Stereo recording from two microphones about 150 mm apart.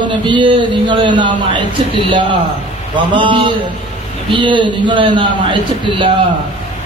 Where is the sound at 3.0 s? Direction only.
35° right (ahead or behind).